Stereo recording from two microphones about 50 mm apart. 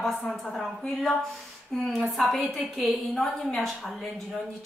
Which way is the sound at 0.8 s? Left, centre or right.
Centre.